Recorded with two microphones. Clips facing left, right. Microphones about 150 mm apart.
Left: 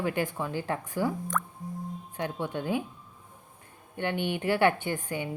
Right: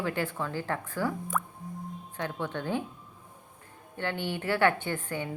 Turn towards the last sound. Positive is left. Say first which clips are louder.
# left 1 dB
turn(degrees=15)  # may be behind; listen again after turning